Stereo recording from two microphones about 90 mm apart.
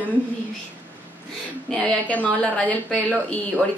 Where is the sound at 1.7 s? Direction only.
15° left (ahead or behind).